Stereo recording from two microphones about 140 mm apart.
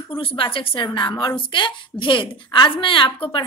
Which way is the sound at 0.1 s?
40° left (ahead or behind).